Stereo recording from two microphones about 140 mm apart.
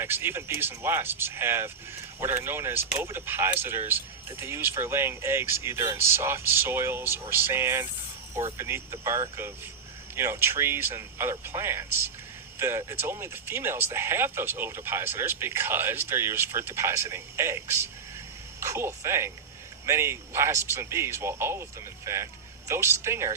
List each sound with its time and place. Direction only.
0.0 s speech: 15° right (ahead or behind)